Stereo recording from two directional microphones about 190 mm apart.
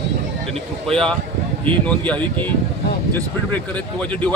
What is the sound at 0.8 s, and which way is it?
Speech, 5° left (ahead or behind).